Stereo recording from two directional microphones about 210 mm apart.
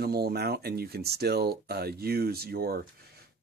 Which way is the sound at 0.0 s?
50° right (ahead or behind).